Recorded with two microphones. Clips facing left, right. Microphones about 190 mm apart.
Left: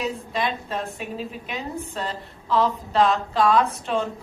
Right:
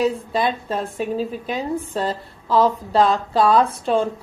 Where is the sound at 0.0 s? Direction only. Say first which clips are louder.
Right 6 dB; 35° right (ahead or behind).